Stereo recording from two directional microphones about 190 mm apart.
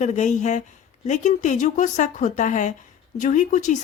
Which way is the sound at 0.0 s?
40° left (ahead or behind).